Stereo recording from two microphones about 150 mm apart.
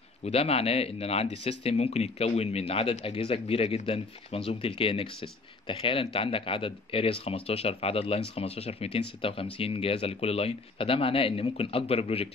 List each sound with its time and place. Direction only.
0.2 s speech: 45° left (ahead or behind)